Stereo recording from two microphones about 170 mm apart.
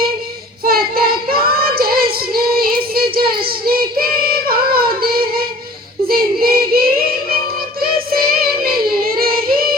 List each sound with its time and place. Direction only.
0.6 s child singing: 60° right (ahead or behind)